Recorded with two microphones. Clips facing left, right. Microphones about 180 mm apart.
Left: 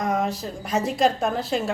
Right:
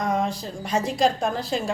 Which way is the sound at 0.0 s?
5° left (ahead or behind).